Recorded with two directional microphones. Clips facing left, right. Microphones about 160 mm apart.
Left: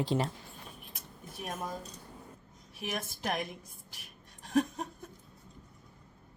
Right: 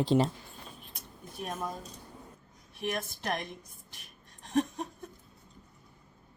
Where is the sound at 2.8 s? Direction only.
5° left (ahead or behind).